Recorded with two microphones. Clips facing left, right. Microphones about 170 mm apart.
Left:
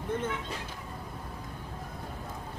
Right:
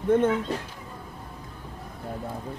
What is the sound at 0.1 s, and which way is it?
Speech, 60° right (ahead or behind).